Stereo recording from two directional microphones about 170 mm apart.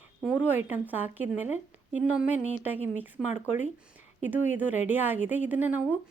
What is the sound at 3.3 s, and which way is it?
Speech, 45° left (ahead or behind).